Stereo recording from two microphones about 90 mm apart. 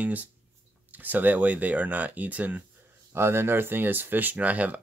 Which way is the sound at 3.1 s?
25° right (ahead or behind).